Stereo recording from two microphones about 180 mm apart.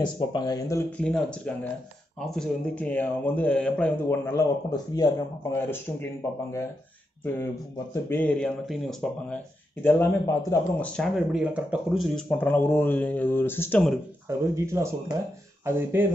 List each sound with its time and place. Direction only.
0.0 s speech: 25° left (ahead or behind)
0.9 s speech: 5° left (ahead or behind)
7.9 s speech: 10° left (ahead or behind)
9.8 s speech: 15° left (ahead or behind)
14.2 s speech: 15° right (ahead or behind)